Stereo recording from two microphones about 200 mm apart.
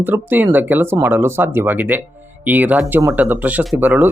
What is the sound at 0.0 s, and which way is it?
Speech, 10° right (ahead or behind).